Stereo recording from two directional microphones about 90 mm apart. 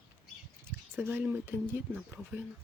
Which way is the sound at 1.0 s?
20° right (ahead or behind).